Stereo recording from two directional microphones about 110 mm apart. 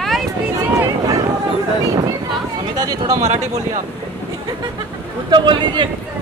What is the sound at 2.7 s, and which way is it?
Speech, 35° right (ahead or behind).